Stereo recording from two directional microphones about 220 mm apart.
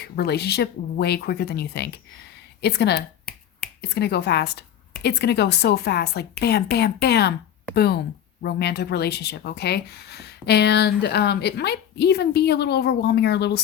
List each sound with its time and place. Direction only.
0.0 s speech: 50° left (ahead or behind)
3.3 s finger snapping: 5° left (ahead or behind)
3.8 s speech: 45° left (ahead or behind)
8.4 s speech: 50° left (ahead or behind)